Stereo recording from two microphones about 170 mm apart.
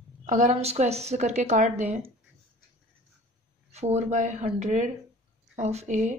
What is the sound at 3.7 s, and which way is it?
A woman's voice, 40° right (ahead or behind).